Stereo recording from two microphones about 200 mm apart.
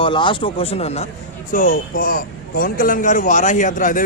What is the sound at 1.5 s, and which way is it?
A man's voice, 40° left (ahead or behind).